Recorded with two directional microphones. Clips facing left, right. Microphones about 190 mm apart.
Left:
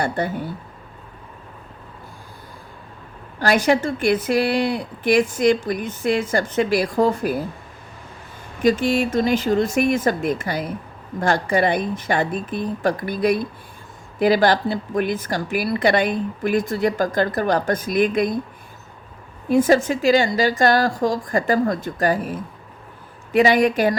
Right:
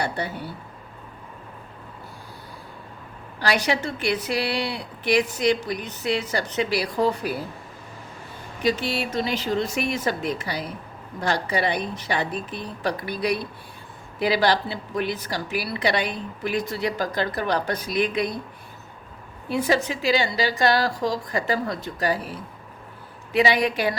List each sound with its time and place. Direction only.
0.0 s a woman's voice: 50° left (ahead or behind)
3.4 s a woman's voice: 50° left (ahead or behind)
8.6 s a woman's voice: 50° left (ahead or behind)
19.5 s a woman's voice: 45° left (ahead or behind)